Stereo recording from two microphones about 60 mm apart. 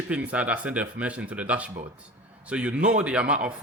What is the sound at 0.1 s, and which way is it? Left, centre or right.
A man's voice, right.